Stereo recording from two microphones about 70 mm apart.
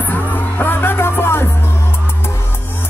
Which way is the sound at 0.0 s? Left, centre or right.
Left.